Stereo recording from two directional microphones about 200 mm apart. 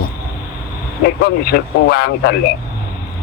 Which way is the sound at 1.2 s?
50° left (ahead or behind).